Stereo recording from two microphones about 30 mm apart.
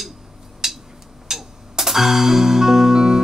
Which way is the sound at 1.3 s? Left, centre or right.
Centre.